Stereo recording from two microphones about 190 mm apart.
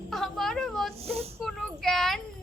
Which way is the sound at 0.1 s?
Centre (ahead or behind).